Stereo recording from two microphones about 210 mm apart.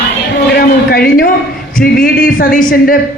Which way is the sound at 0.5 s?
45° left (ahead or behind).